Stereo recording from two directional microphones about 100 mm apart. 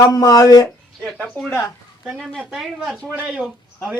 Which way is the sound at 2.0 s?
5° right (ahead or behind).